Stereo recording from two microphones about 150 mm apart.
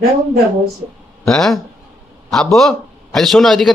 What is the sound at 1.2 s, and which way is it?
A man's voice, 5° left (ahead or behind).